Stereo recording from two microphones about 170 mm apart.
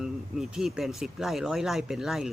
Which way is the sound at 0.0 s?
Centre (ahead or behind).